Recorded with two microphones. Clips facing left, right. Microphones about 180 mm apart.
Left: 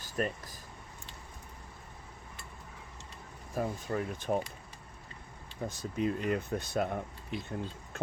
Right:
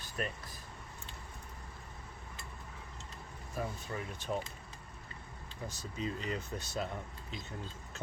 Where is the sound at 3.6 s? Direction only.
50° left (ahead or behind).